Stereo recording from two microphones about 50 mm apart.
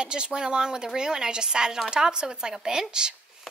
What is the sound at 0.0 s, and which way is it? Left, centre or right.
A woman's voice, centre.